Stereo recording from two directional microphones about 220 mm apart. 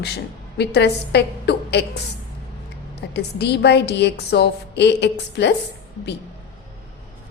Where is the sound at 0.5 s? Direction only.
50° left (ahead or behind).